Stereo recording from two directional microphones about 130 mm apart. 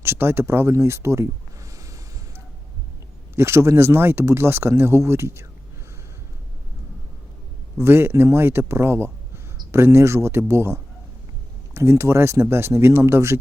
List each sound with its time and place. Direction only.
0.0 s speech: 20° right (ahead or behind)
3.3 s speech: 20° right (ahead or behind)
7.8 s speech: 20° right (ahead or behind)